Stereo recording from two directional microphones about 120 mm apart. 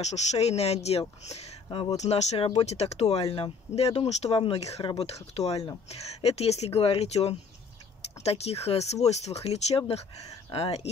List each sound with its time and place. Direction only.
0.0 s speech: 65° left (ahead or behind)